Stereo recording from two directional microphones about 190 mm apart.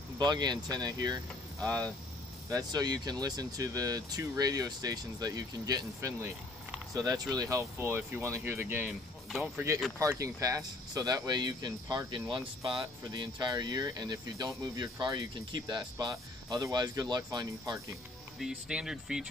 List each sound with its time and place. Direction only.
0.2 s speech: 20° right (ahead or behind)
1.6 s speech: 5° left (ahead or behind)
2.5 s speech: 20° right (ahead or behind)
18.4 s speech: 5° right (ahead or behind)